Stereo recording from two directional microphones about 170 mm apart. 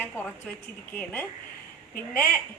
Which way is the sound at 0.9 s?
10° left (ahead or behind).